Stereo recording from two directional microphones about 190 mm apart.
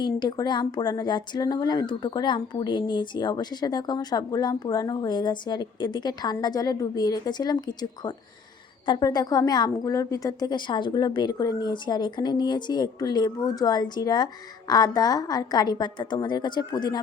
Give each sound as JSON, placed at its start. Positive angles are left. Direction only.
{"t": 0.0, "sound": "speech", "side_deg": 20}